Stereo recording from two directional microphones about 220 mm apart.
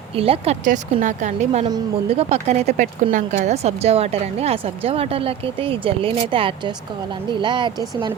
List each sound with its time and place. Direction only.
0.2 s speech: 25° right (ahead or behind)
1.6 s speech: 20° right (ahead or behind)